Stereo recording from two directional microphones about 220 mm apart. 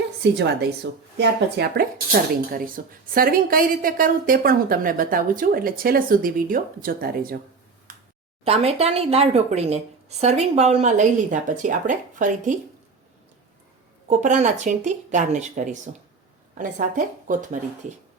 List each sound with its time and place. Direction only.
0.2 s a woman's voice: 50° right (ahead or behind)
8.4 s a woman's voice: 30° right (ahead or behind)
14.1 s a woman's voice: 35° right (ahead or behind)